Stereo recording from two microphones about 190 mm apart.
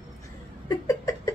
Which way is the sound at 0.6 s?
15° left (ahead or behind).